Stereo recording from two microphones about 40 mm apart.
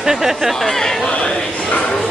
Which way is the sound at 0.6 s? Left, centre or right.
Centre.